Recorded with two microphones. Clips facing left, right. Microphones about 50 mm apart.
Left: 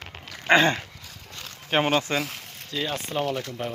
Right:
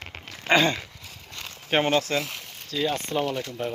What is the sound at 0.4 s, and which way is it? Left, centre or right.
Speech, left.